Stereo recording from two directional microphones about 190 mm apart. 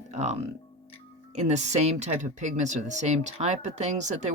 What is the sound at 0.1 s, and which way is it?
Music, 35° right (ahead or behind).